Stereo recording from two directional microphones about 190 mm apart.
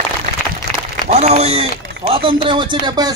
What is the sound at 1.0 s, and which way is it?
Speech, 35° right (ahead or behind).